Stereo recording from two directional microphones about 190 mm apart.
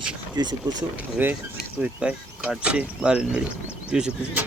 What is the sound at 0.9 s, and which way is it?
Speech, 10° right (ahead or behind).